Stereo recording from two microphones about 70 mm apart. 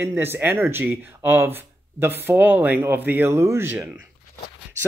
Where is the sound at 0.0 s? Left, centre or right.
Right.